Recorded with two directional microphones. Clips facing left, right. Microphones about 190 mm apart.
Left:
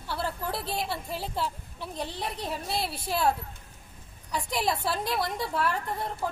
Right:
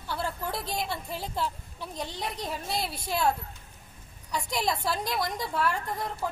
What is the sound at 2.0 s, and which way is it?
Speech, 30° left (ahead or behind).